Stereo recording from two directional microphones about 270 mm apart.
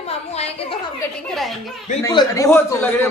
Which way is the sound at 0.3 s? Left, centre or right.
Left.